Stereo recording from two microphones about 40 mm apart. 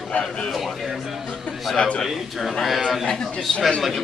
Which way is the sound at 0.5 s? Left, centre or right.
Centre.